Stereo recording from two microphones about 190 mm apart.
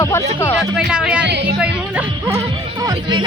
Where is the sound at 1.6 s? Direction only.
10° right (ahead or behind).